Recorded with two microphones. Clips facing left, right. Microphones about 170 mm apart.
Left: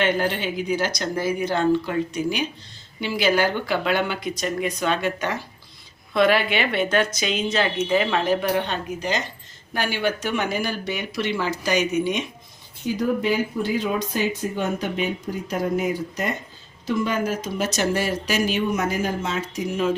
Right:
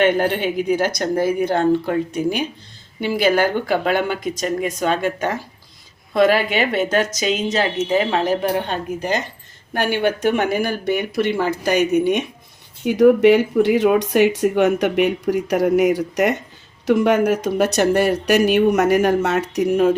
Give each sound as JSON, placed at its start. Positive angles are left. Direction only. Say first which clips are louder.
{"t": 0.0, "sound": "a woman's voice", "louder": "right 5 dB", "side_deg": -55}
{"t": 12.8, "sound": "speech", "louder": "right 11 dB", "side_deg": -70}